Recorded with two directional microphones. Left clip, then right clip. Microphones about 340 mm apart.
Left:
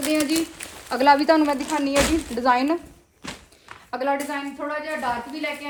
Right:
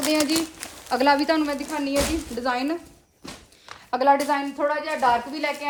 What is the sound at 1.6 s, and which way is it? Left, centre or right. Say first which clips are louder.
Speech: left 3 dB; left.